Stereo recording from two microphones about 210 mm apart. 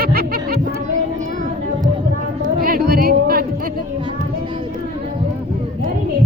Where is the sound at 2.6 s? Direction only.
45° right (ahead or behind).